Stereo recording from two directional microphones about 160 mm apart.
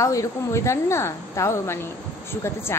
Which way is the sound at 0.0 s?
20° left (ahead or behind).